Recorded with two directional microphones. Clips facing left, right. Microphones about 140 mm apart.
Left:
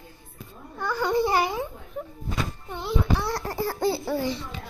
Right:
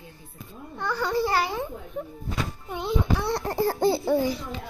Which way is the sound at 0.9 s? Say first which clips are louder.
Left 2 dB; 15° left (ahead or behind).